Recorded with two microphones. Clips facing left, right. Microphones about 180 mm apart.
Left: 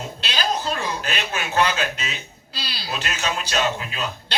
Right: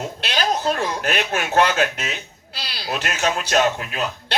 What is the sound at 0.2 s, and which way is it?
A man's voice, 60° right (ahead or behind).